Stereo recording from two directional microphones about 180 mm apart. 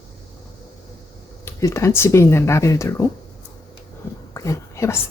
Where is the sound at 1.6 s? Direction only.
15° left (ahead or behind).